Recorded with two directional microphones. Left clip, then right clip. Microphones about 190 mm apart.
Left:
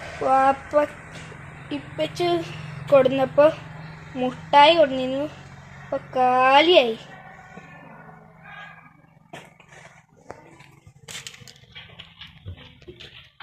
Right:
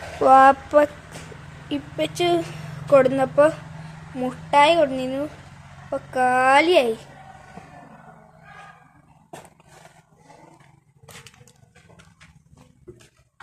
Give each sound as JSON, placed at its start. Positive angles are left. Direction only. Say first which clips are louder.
{"t": 0.2, "sound": "speech", "louder": "right 6 dB", "side_deg": -40}
{"t": 1.7, "sound": "speech", "louder": "right 2 dB", "side_deg": -15}
{"t": 2.8, "sound": "a woman's voice", "louder": "right 1 dB", "side_deg": 0}